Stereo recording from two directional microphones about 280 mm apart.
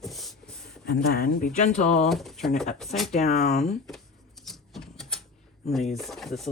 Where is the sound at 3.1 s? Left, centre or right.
Left.